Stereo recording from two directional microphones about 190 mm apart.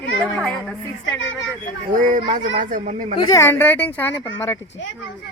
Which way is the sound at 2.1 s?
45° right (ahead or behind).